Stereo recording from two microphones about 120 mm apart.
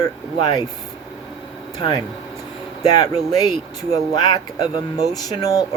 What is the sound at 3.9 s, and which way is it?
Speech, 35° left (ahead or behind).